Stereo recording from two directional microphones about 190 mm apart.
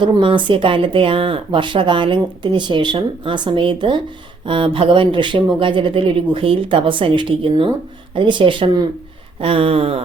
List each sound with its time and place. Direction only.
0.0 s speech: 25° right (ahead or behind)